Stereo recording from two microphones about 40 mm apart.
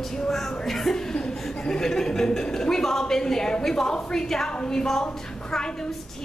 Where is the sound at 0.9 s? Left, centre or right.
Centre.